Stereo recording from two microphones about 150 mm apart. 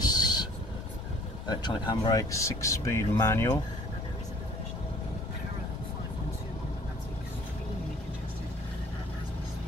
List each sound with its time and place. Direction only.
0.0 s vehicle: 25° left (ahead or behind)
1.5 s speech: 30° left (ahead or behind)